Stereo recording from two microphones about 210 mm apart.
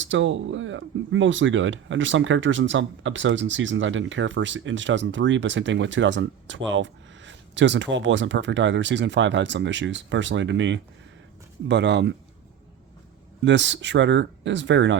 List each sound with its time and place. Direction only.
0.0 s speech: 65° right (ahead or behind)
13.4 s speech: 55° right (ahead or behind)